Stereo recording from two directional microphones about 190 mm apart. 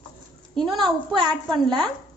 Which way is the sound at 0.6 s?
25° right (ahead or behind).